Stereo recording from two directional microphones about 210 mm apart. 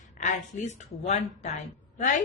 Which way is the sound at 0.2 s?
35° left (ahead or behind).